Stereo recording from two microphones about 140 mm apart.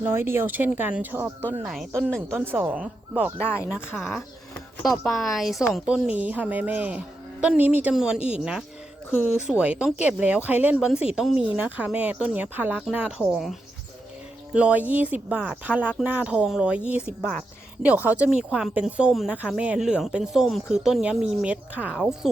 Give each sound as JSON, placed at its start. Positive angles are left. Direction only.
{"t": 0.0, "sound": "speech", "side_deg": -15}
{"t": 1.6, "sound": "speech", "side_deg": 0}
{"t": 2.4, "sound": "speech", "side_deg": -15}
{"t": 3.3, "sound": "speech", "side_deg": 15}
{"t": 3.7, "sound": "speech", "side_deg": 0}